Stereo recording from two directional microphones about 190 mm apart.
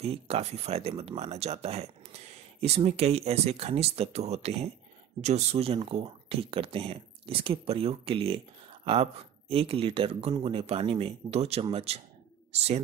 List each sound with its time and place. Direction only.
0.0 s speech: 30° right (ahead or behind)